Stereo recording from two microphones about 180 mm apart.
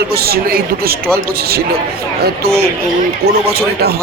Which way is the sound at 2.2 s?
60° right (ahead or behind).